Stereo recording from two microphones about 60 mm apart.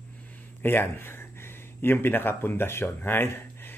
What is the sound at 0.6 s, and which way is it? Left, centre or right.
Speech, left.